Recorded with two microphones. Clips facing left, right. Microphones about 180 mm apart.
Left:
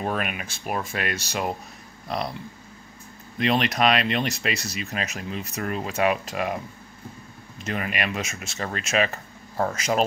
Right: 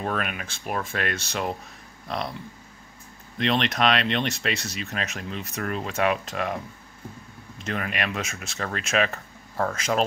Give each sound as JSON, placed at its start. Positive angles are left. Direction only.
{"t": 0.0, "sound": "speech", "side_deg": 10}
{"t": 3.3, "sound": "speech", "side_deg": 5}